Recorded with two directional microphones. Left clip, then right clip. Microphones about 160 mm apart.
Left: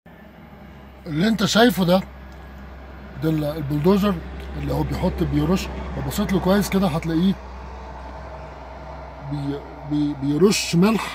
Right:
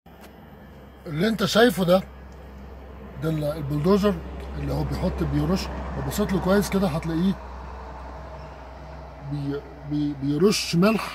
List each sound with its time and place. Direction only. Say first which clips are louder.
1.0 s speech: left 2 dB; 5° left (ahead or behind)
3.2 s speech: left 3 dB; 20° left (ahead or behind)
9.9 s speech: left 4 dB; 20° left (ahead or behind)